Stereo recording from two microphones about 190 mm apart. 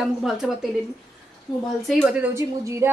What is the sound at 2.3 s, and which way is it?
Speech, 15° right (ahead or behind).